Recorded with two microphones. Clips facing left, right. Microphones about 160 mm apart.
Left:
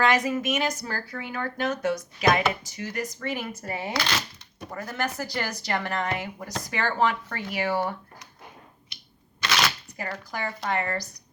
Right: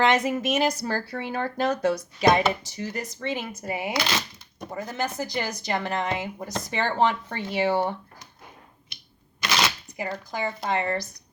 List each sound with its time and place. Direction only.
0.0 s speech: 25° right (ahead or behind)
9.4 s shuffling cards: 20° right (ahead or behind)
10.0 s speech: 20° right (ahead or behind)